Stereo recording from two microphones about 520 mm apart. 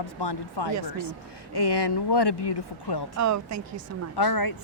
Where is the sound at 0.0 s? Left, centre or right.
Left.